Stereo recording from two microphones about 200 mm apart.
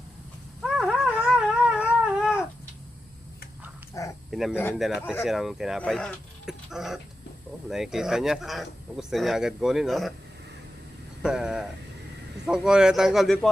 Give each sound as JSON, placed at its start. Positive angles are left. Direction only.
{"t": 0.6, "sound": "dog", "side_deg": -5}
{"t": 1.3, "sound": "cat", "side_deg": -5}
{"t": 4.0, "sound": "a sound", "side_deg": 15}
{"t": 4.3, "sound": "speech", "side_deg": 0}
{"t": 4.5, "sound": "speech", "side_deg": 10}
{"t": 5.2, "sound": "speech", "side_deg": 0}
{"t": 11.2, "sound": "speech", "side_deg": -5}